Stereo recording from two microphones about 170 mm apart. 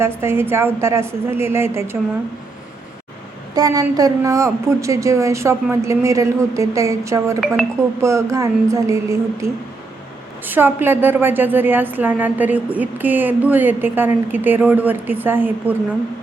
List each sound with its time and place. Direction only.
0.0 s a woman's voice: 15° right (ahead or behind)
3.5 s a woman's voice: 20° right (ahead or behind)